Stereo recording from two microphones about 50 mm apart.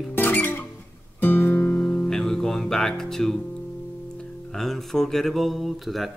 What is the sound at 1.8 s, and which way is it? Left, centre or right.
Guitar, left.